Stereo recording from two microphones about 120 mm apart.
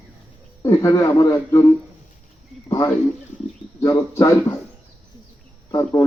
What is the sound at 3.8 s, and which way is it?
Speech, 25° left (ahead or behind).